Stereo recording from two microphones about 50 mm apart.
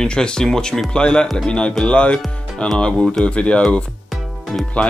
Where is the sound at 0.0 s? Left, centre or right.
Centre.